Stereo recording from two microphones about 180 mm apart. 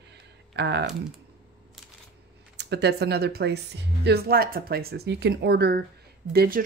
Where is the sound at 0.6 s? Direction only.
70° right (ahead or behind).